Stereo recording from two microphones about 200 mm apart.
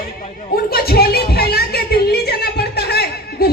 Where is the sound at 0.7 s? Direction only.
50° left (ahead or behind).